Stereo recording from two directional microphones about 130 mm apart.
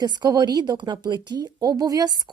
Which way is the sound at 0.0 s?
30° right (ahead or behind).